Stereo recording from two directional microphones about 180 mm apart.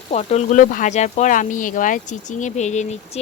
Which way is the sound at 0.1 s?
40° left (ahead or behind).